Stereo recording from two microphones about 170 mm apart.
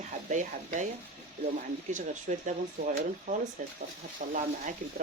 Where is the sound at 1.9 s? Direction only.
45° right (ahead or behind).